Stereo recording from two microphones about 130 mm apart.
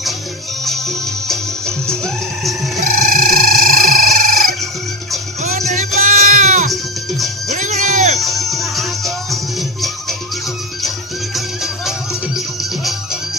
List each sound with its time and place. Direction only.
0.6 s music: centre (ahead or behind)
2.8 s music: 90° right
3.9 s a sound: 90° right
5.4 s music: 60° right (ahead or behind)
6.7 s music: centre (ahead or behind)
7.5 s music: 65° right (ahead or behind)
8.2 s music: centre (ahead or behind)
11.3 s music: centre (ahead or behind)